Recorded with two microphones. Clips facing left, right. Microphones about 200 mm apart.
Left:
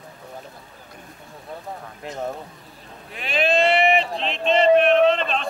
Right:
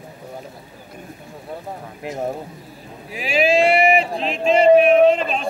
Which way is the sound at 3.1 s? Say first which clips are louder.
Right 4 dB; centre (ahead or behind).